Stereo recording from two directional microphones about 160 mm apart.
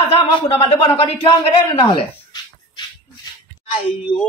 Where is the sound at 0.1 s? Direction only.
35° left (ahead or behind).